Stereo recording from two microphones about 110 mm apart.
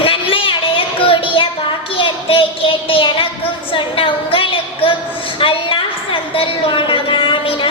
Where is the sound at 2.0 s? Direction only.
55° left (ahead or behind).